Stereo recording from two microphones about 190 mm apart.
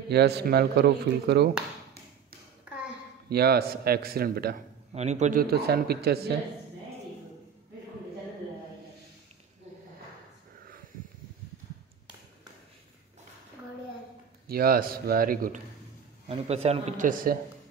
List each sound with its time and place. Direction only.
0.1 s speech: 60° right (ahead or behind)
3.3 s a man's voice: 55° right (ahead or behind)
4.9 s a man's voice: 35° right (ahead or behind)
5.4 s speech: 55° right (ahead or behind)
14.5 s a man's voice: 50° right (ahead or behind)
16.3 s a man's voice: 35° right (ahead or behind)